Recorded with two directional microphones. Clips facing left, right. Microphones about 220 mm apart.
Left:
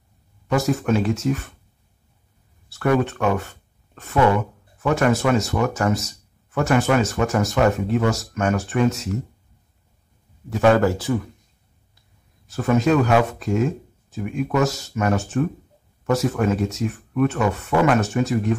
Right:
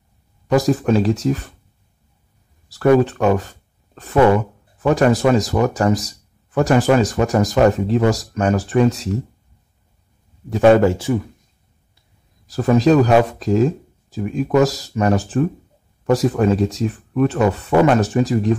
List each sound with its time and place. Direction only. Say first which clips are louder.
0.5 s speech: right 4 dB; 35° right (ahead or behind)
2.7 s speech: right 6 dB; 35° right (ahead or behind)
10.5 s speech: right 5 dB; 25° right (ahead or behind)
12.4 s speech: right 4 dB; 35° right (ahead or behind)